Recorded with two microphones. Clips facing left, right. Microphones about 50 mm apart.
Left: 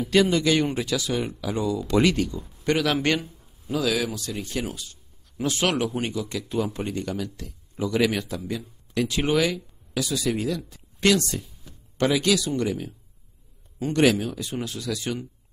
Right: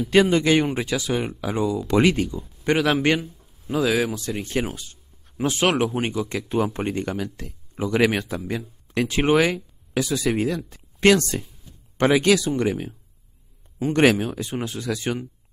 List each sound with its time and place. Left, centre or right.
0.1 s a man's voice: right
3.7 s speech: right
14.1 s speech: right